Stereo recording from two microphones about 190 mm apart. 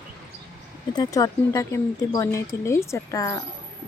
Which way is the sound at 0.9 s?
20° left (ahead or behind).